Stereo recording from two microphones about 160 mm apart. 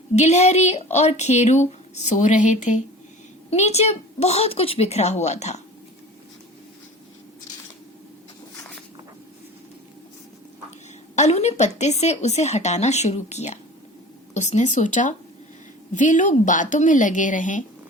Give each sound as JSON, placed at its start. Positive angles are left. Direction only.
{"t": 0.2, "sound": "speech", "side_deg": 45}
{"t": 11.1, "sound": "speech", "side_deg": 45}